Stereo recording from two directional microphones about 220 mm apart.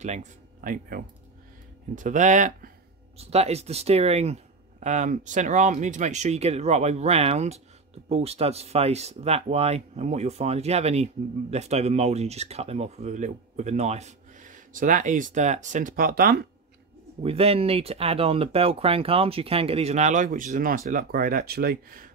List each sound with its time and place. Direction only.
0.0 s speech: 30° right (ahead or behind)
17.2 s speech: 25° right (ahead or behind); by 22.1 s 40° right (ahead or behind)